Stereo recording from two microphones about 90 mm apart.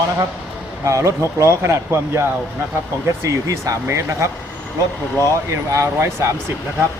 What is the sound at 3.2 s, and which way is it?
Speech, 35° right (ahead or behind).